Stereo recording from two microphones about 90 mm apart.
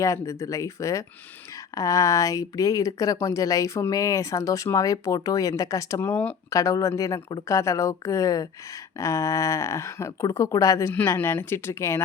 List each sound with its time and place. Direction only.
0.0 s speech: 35° left (ahead or behind)
6.0 s speech: 20° left (ahead or behind)
6.5 s speech: 40° left (ahead or behind)